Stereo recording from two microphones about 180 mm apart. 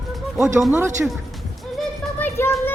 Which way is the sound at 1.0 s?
5° right (ahead or behind).